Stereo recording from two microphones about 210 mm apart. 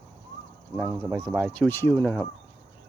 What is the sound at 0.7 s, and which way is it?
Speech, 10° right (ahead or behind).